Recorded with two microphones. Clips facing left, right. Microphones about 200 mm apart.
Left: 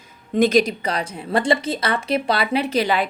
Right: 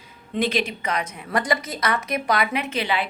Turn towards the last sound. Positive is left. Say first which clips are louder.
# left 5 dB
turn(degrees=40)  # may be behind; listen again after turning